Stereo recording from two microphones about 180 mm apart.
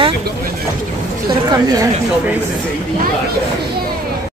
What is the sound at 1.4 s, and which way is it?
Speech, 20° right (ahead or behind).